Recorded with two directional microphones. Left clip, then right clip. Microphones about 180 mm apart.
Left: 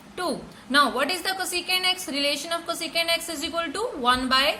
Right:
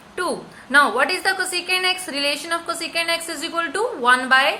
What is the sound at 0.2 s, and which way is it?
A woman's voice, 15° left (ahead or behind).